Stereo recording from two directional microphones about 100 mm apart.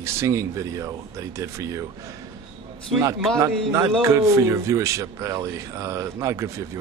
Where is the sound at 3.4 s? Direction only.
30° right (ahead or behind).